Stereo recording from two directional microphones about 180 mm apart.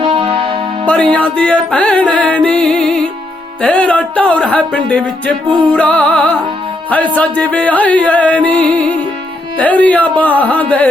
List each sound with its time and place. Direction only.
0.0 s music: 30° right (ahead or behind)
1.1 s music: 5° left (ahead or behind)